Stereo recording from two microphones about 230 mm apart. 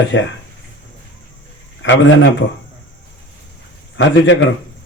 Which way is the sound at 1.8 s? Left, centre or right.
Left.